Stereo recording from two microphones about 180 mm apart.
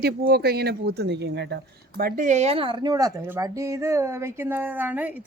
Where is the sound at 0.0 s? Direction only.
60° right (ahead or behind).